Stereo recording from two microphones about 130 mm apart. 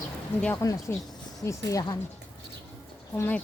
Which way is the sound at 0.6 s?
25° left (ahead or behind).